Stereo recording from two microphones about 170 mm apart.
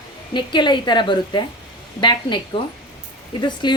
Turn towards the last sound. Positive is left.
turn(degrees=25)  # may be behind; listen again after turning